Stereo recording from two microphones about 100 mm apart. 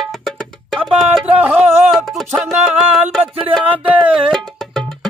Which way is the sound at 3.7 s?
15° right (ahead or behind).